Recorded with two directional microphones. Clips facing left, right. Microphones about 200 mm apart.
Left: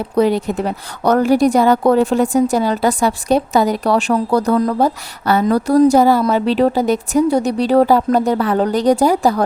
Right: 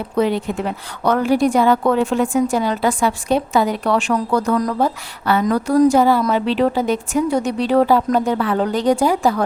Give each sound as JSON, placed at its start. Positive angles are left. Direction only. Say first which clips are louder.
{"t": 0.2, "sound": "a woman's voice", "louder": "left 3 dB", "side_deg": 40}